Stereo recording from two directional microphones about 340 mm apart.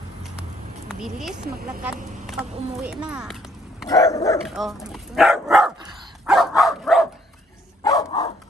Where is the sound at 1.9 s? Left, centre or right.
Right.